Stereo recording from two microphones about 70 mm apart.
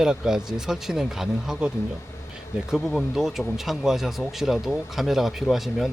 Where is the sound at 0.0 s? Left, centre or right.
Centre.